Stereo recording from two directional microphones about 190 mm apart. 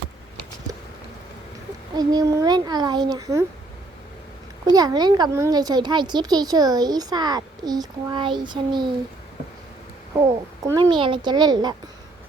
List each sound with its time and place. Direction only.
2.0 s speech: 20° right (ahead or behind)
4.6 s speech: 20° right (ahead or behind)
10.8 s speech: 25° right (ahead or behind)